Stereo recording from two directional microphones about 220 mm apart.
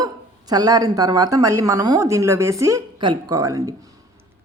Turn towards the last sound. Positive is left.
turn(degrees=-15)  # may be behind; listen again after turning